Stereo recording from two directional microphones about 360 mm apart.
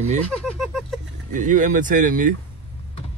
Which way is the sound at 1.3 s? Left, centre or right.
Right.